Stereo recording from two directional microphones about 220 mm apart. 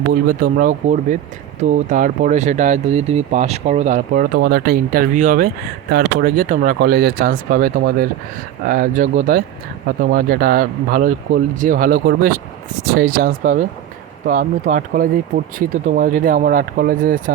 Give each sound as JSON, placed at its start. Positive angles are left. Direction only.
{"t": 0.3, "sound": "speech", "side_deg": -40}